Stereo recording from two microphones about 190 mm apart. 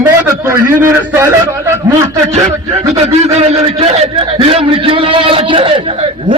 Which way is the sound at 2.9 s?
35° right (ahead or behind).